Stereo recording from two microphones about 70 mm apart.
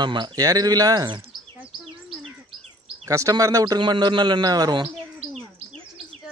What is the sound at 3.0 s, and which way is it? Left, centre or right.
A man's voice, right.